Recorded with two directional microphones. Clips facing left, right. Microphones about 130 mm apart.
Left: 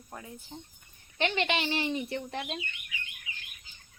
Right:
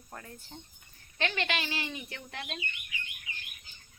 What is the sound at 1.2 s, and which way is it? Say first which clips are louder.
Speech: left 4 dB; 20° left (ahead or behind).